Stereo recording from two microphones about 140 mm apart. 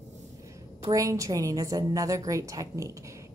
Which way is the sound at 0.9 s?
25° right (ahead or behind).